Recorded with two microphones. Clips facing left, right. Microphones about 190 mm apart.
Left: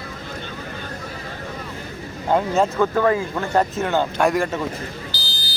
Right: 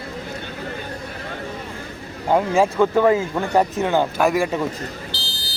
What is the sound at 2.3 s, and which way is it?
Speech, 10° right (ahead or behind).